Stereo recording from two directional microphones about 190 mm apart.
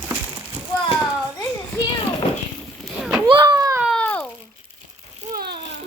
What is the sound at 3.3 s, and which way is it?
Children playing, 25° right (ahead or behind).